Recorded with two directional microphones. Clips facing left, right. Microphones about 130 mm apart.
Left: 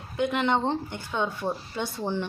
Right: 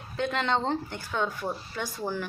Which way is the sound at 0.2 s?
15° left (ahead or behind).